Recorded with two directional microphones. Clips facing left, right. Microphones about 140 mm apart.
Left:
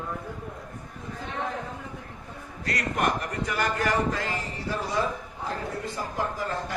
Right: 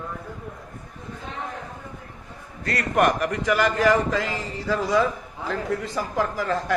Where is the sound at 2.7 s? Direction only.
70° right (ahead or behind); by 6.7 s 90° right.